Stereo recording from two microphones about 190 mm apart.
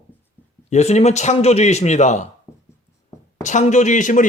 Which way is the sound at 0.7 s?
35° left (ahead or behind).